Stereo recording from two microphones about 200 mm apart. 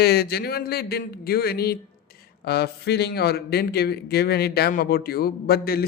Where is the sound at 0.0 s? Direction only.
50° left (ahead or behind).